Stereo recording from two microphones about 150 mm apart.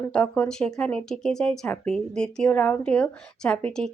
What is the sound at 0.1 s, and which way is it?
Speech, 10° left (ahead or behind).